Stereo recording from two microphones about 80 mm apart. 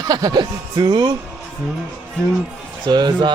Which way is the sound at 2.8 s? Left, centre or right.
Right.